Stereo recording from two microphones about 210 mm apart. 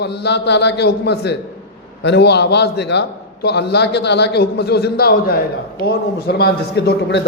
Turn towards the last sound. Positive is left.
turn(degrees=55)  # may be behind; listen again after turning